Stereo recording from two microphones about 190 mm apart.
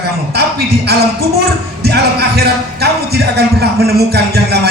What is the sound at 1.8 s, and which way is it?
Speech, 60° right (ahead or behind).